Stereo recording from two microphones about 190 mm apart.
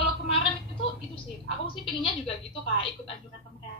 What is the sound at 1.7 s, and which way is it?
Speech, 25° left (ahead or behind).